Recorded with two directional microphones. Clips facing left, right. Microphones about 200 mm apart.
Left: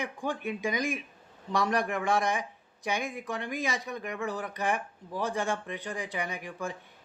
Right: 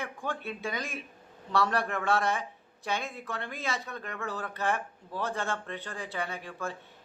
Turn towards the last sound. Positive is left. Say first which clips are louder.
# left 1 dB
turn(degrees=15)  # may be behind; listen again after turning